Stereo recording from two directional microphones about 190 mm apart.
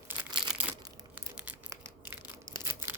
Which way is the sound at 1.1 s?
10° right (ahead or behind).